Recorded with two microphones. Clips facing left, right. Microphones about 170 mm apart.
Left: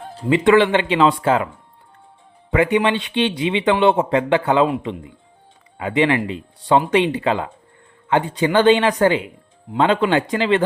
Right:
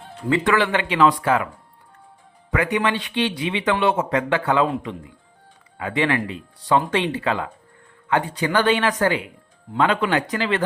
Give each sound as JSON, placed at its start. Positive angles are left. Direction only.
{"t": 0.3, "sound": "a man's voice", "side_deg": 20}
{"t": 2.5, "sound": "a man's voice", "side_deg": 25}